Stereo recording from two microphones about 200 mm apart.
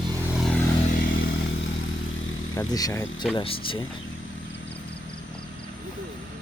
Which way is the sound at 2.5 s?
15° left (ahead or behind).